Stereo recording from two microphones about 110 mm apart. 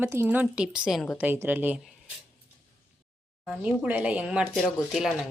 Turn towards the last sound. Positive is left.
turn(degrees=-5)  # may be behind; listen again after turning